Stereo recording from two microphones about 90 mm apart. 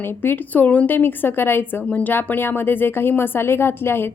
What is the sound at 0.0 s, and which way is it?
Speech, 25° left (ahead or behind).